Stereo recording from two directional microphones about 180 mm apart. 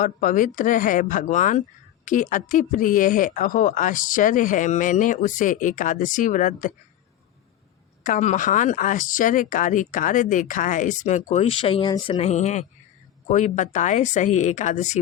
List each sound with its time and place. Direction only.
0.0 s speech: 45° left (ahead or behind)
8.0 s speech: 45° left (ahead or behind)